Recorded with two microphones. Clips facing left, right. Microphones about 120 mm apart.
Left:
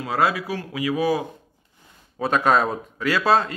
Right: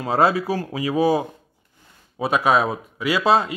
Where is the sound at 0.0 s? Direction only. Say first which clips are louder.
Right 4 dB; 30° right (ahead or behind).